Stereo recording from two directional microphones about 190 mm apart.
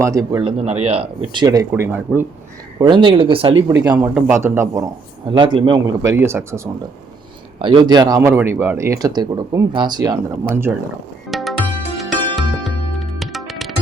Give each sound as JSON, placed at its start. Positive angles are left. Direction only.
{"t": 0.0, "sound": "speech", "side_deg": -15}
{"t": 0.6, "sound": "speech", "side_deg": -35}
{"t": 2.7, "sound": "speech", "side_deg": -25}
{"t": 3.7, "sound": "speech", "side_deg": -10}
{"t": 5.3, "sound": "speech", "side_deg": -25}
{"t": 7.6, "sound": "speech", "side_deg": -25}
{"t": 11.3, "sound": "music", "side_deg": 0}